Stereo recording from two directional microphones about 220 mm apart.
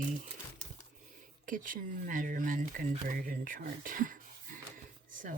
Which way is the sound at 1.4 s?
35° right (ahead or behind).